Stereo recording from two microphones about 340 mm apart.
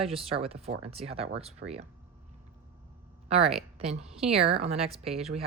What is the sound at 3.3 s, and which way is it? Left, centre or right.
Speech, centre.